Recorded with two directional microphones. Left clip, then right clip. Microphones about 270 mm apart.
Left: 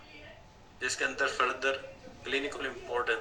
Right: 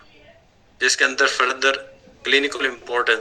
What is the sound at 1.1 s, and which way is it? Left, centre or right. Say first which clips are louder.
Speech: right 11 dB; right.